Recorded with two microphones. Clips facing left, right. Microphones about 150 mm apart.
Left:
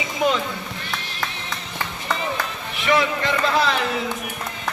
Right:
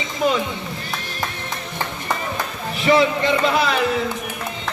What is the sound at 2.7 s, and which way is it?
Speech, 30° right (ahead or behind).